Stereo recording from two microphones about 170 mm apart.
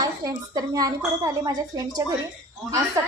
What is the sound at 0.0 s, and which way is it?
Speech, 20° right (ahead or behind).